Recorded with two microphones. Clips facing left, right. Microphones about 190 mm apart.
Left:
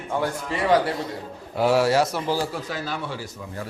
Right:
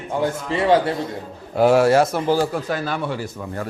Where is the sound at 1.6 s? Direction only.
50° right (ahead or behind).